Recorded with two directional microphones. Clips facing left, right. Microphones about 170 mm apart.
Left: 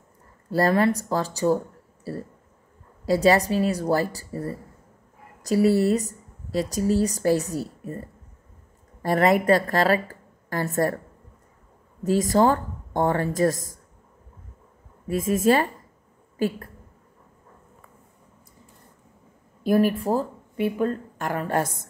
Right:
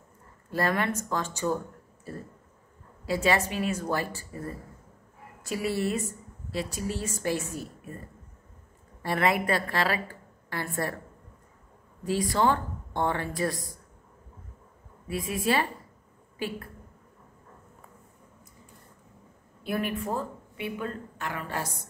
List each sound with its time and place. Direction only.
0.5 s a woman's voice: 35° left (ahead or behind)
9.0 s a woman's voice: 40° left (ahead or behind)
12.0 s a woman's voice: 45° left (ahead or behind)
15.0 s a woman's voice: 45° left (ahead or behind)
19.6 s speech: 40° left (ahead or behind)